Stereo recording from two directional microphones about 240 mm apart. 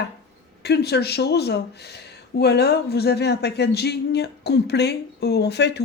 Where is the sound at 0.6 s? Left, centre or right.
Left.